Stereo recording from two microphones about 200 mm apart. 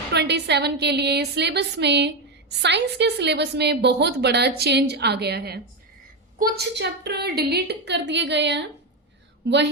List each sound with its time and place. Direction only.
0.1 s a woman's voice: 60° right (ahead or behind)